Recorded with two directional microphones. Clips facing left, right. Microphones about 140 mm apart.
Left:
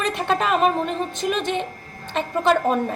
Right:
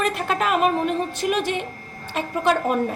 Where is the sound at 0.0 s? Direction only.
Centre (ahead or behind).